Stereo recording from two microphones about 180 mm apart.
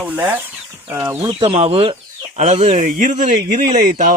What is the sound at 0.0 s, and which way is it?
Speech, 10° right (ahead or behind).